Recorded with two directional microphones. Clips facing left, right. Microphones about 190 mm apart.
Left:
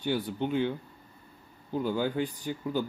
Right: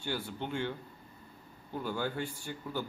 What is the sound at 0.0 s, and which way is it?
Speech, 15° left (ahead or behind).